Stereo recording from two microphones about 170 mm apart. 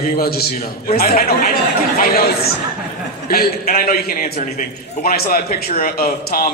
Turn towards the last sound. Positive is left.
turn(degrees=60)  # may be behind; listen again after turning